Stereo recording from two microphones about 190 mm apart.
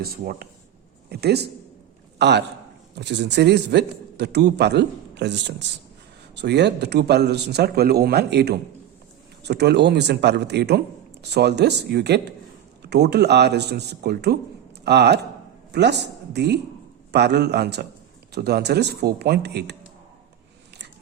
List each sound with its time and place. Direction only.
0.0 s a man's voice: 55° right (ahead or behind)